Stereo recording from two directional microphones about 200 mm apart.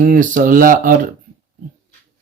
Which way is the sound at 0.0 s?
40° right (ahead or behind).